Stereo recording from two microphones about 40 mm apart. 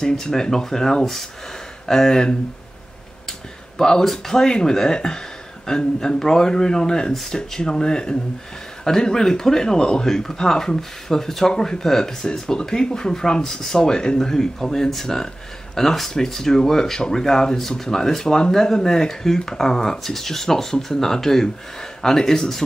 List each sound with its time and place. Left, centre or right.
0.0 s speech: centre
3.3 s speech: centre